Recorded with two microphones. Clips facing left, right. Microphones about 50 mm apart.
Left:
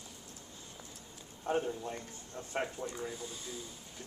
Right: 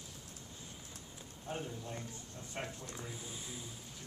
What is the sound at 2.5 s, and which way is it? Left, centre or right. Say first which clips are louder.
Speech: left 7 dB; left.